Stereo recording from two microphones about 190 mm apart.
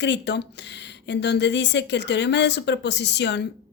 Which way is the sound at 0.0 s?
65° left (ahead or behind).